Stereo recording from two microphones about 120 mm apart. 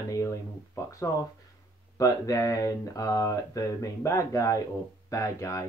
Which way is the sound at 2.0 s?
30° left (ahead or behind).